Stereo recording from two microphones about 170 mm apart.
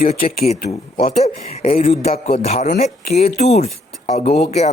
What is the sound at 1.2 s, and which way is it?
Speech, 35° left (ahead or behind).